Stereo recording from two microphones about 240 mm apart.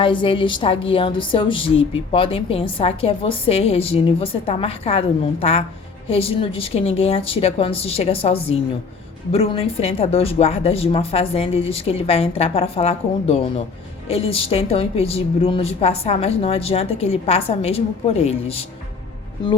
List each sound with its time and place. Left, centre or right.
0.0 s a woman's voice: left